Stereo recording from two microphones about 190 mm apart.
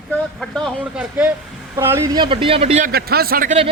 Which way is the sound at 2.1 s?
25° right (ahead or behind).